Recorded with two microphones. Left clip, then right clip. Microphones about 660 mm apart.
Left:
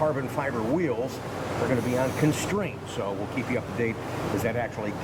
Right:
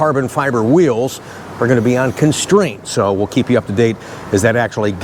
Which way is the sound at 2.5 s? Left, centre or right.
Right.